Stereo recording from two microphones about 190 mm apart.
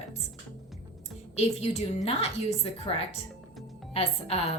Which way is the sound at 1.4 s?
35° left (ahead or behind).